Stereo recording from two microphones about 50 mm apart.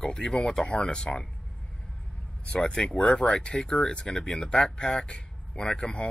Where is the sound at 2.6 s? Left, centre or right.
Centre.